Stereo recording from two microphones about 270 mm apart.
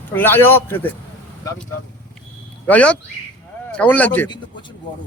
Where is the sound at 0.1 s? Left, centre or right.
Centre.